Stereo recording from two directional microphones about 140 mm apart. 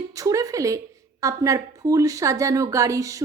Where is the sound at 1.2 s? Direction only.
25° right (ahead or behind).